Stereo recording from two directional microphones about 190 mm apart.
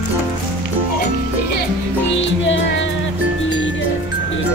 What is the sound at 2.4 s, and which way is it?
Music, 75° left (ahead or behind).